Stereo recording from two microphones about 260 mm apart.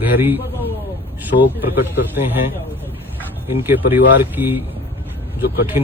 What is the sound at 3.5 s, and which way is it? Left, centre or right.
Speech, centre.